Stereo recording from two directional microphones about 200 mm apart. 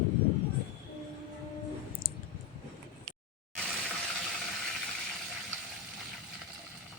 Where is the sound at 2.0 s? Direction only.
45° left (ahead or behind).